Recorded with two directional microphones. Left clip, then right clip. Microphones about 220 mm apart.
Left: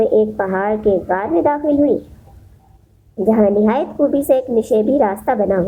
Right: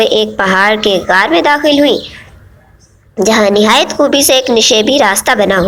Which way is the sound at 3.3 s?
15° right (ahead or behind).